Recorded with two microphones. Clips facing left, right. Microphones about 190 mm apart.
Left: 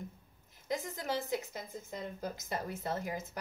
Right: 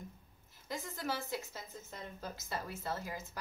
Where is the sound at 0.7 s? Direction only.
20° left (ahead or behind).